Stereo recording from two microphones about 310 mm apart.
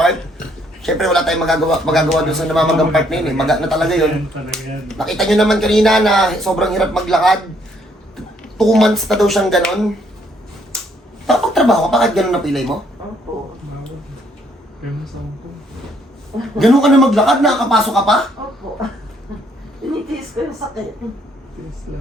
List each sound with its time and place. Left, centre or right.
0.0 s speech: centre
11.3 s speech: centre
16.6 s speech: centre
19.8 s a sound: centre